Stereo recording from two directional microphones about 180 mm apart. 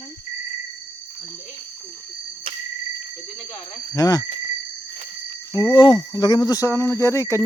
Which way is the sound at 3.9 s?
20° left (ahead or behind).